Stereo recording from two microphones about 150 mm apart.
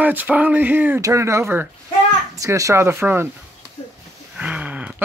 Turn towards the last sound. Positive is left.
turn(degrees=-10)  # may be behind; listen again after turning